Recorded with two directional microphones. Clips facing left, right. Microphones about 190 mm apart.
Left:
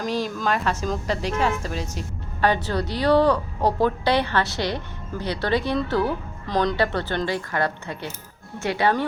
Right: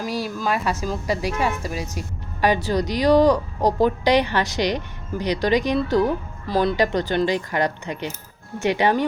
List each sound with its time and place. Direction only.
0.0 s speech: 10° right (ahead or behind)